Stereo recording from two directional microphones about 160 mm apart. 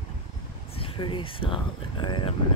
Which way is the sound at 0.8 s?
35° left (ahead or behind).